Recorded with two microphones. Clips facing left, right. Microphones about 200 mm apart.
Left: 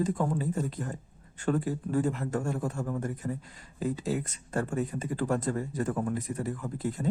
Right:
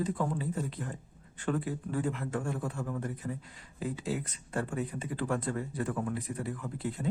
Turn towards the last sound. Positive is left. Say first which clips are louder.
# left 3 dB
turn(degrees=40)  # may be behind; listen again after turning